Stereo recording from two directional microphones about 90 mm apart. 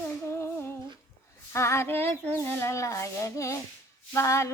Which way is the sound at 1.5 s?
30° left (ahead or behind).